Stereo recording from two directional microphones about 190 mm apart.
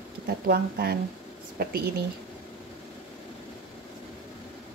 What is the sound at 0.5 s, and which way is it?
A woman's voice, 55° right (ahead or behind).